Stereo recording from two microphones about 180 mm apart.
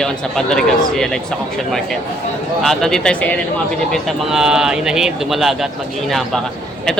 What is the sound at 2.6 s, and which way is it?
Speech, 5° left (ahead or behind).